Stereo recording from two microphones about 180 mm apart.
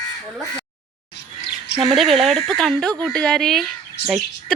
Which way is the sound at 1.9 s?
Centre (ahead or behind).